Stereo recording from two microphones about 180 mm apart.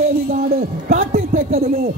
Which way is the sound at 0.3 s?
55° right (ahead or behind).